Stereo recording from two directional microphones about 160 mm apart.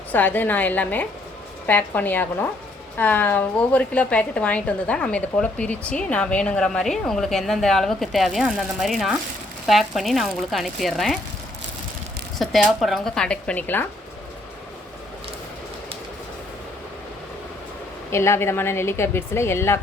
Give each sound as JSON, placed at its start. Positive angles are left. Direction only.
{"t": 0.1, "sound": "a woman's voice", "side_deg": 10}
{"t": 12.4, "sound": "a woman's voice", "side_deg": 0}
{"t": 18.1, "sound": "a woman's voice", "side_deg": 15}